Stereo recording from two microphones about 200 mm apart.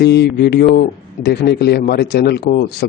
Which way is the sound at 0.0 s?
55° left (ahead or behind).